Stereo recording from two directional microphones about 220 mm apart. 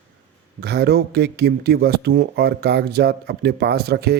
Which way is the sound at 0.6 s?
45° right (ahead or behind).